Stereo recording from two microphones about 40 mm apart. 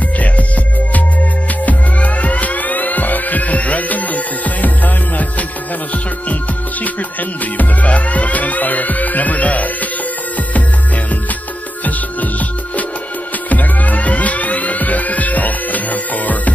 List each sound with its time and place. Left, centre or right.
1.7 s music: left
7.5 s music: left
11.8 s music: left